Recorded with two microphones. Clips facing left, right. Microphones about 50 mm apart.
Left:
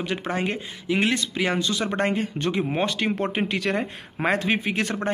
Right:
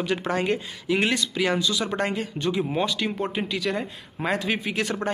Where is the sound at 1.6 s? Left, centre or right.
Left.